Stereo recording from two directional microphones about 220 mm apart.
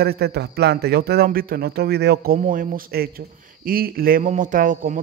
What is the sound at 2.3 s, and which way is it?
Speech, 35° right (ahead or behind).